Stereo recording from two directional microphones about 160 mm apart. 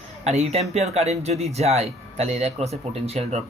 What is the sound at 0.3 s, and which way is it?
Speech, 40° right (ahead or behind).